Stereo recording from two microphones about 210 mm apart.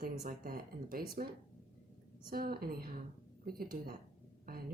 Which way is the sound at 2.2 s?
45° right (ahead or behind).